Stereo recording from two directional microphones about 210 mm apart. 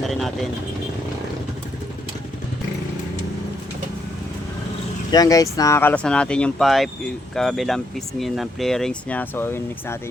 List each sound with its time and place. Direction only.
5.1 s speech: 15° left (ahead or behind)